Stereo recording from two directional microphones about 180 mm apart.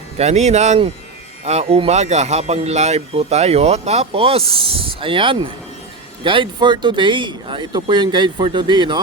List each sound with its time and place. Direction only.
0.2 s speech: 35° right (ahead or behind)